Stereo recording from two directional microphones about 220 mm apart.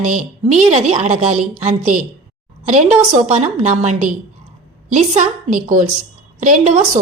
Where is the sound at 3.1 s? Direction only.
35° right (ahead or behind).